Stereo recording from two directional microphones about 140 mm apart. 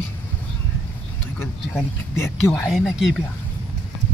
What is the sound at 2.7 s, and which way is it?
Speech, centre (ahead or behind).